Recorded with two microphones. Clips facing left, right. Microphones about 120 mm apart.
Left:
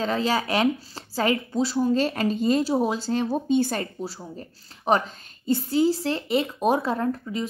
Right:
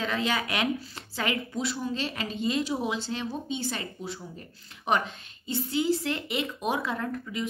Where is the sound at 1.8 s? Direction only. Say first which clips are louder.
Left 10 dB; 45° left (ahead or behind).